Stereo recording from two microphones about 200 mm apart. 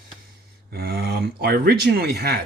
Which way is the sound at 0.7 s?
50° right (ahead or behind).